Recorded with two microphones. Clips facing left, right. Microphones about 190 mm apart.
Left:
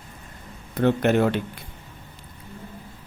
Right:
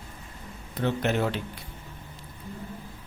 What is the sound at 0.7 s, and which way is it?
Speech, 55° left (ahead or behind).